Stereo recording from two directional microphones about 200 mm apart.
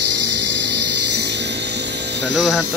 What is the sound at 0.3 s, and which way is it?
Music, 60° right (ahead or behind).